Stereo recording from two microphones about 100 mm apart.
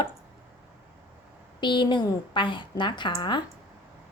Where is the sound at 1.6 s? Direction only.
50° left (ahead or behind).